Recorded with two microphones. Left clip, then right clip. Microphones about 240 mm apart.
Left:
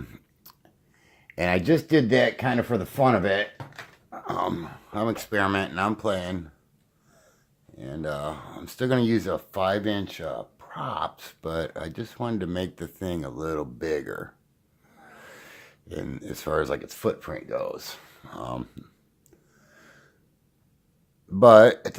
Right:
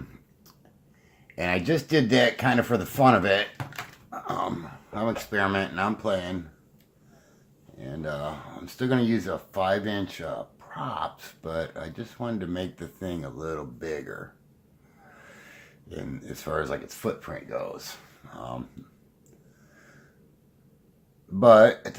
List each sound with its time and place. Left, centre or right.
1.4 s speech: left
4.1 s speech: left
7.8 s speech: left
21.3 s speech: left